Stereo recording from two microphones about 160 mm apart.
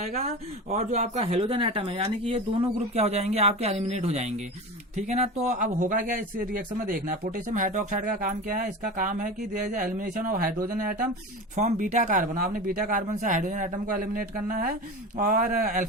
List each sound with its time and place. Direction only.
0.0 s speech: 45° right (ahead or behind); by 10.9 s 65° right (ahead or behind)
11.5 s speech: 50° right (ahead or behind)